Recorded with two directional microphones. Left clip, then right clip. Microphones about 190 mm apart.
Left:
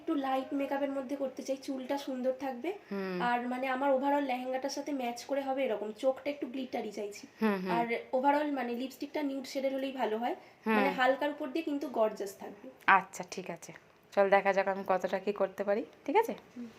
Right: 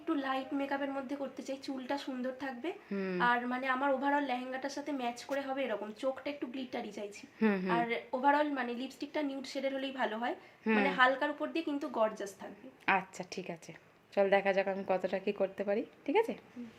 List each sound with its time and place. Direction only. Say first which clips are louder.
0.1 s a sound: left 2 dB; 15° right (ahead or behind)
0.7 s speech: left 2 dB; 70° right (ahead or behind)
1.5 s a woman's voice: left 3 dB; 15° right (ahead or behind)
7.3 s a woman's voice: even; 20° right (ahead or behind)
7.8 s a woman's voice: left 2 dB; 10° right (ahead or behind)